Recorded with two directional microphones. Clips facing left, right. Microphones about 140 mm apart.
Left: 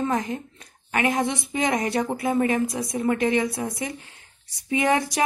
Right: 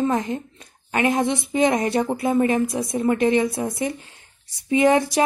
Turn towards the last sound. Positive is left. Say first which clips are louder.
# right 5 dB
turn(degrees=-30)  # may be behind; listen again after turning